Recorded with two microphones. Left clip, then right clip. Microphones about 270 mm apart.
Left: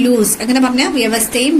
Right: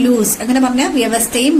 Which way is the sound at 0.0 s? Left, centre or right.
Centre.